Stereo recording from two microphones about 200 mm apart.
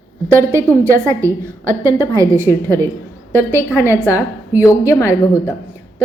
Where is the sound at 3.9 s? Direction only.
10° right (ahead or behind).